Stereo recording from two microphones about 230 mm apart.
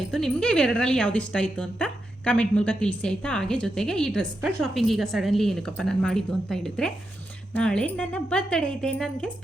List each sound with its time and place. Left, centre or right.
0.0 s speech: centre